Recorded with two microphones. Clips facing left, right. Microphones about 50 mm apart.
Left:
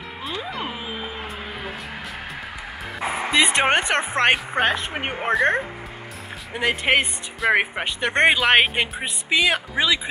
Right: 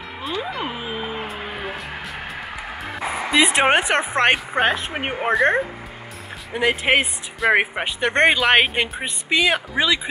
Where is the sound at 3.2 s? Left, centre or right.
Centre.